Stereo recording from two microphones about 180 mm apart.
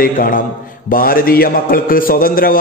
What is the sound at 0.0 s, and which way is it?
A man's voice, 50° left (ahead or behind).